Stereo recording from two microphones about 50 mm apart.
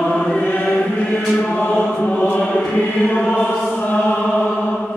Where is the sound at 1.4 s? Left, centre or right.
Centre.